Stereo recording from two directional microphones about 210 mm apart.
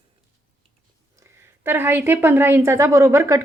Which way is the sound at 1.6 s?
10° right (ahead or behind).